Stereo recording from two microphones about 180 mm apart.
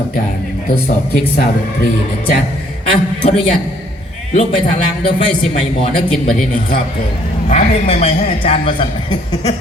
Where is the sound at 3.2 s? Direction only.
45° left (ahead or behind).